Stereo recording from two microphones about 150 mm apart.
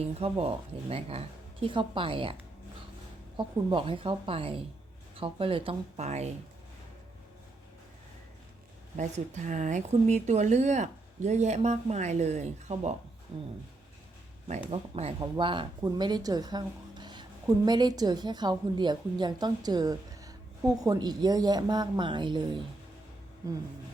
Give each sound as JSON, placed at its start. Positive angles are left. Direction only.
{"t": 0.0, "sound": "a woman's voice", "side_deg": -40}
{"t": 3.3, "sound": "a woman's voice", "side_deg": -35}
{"t": 9.0, "sound": "speech", "side_deg": -50}
{"t": 13.3, "sound": "a woman's voice", "side_deg": -35}
{"t": 14.7, "sound": "a woman's voice", "side_deg": -45}